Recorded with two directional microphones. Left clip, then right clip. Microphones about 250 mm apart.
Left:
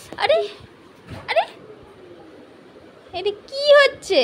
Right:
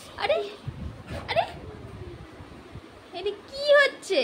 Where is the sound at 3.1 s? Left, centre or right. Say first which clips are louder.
Left 7 dB; left.